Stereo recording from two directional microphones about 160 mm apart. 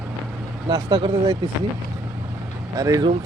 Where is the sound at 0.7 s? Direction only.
30° right (ahead or behind).